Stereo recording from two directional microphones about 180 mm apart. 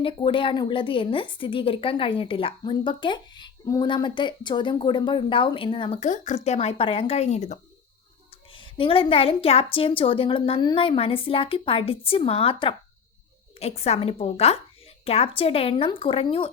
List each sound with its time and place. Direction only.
0.0 s a woman's voice: 30° left (ahead or behind)
8.5 s a woman's voice: 30° left (ahead or behind)